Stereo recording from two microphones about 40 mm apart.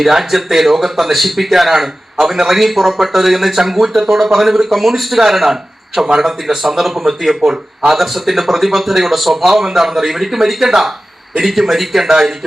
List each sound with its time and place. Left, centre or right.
0.0 s a man's voice: centre